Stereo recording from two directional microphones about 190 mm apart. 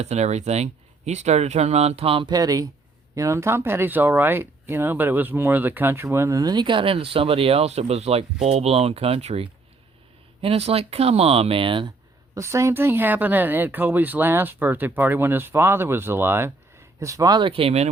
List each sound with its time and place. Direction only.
0.0 s speech: 35° right (ahead or behind)